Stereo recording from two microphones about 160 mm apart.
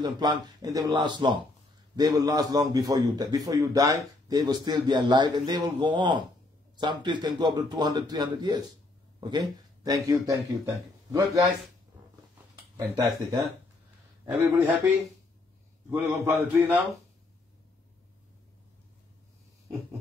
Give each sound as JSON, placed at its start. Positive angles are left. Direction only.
{"t": 0.0, "sound": "speech", "side_deg": -25}
{"t": 12.7, "sound": "speech", "side_deg": -20}
{"t": 15.9, "sound": "a man's voice", "side_deg": -10}